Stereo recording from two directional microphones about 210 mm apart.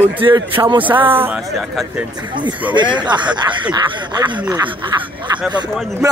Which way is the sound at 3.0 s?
20° right (ahead or behind).